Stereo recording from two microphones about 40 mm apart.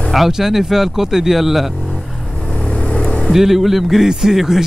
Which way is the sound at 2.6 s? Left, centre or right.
Left.